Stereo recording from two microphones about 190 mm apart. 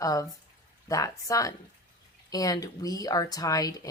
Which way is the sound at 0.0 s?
20° left (ahead or behind).